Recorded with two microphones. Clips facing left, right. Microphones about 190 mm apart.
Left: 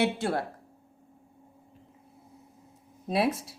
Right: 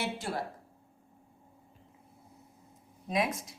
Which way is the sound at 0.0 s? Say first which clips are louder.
Left 8 dB; 65° left (ahead or behind).